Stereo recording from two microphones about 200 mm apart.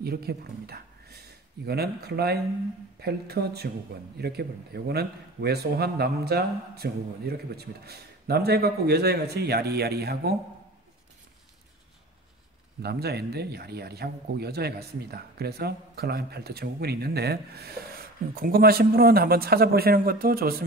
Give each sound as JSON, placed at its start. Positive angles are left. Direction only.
{"t": 0.0, "sound": "a man's voice", "side_deg": -50}
{"t": 12.8, "sound": "a man's voice", "side_deg": -50}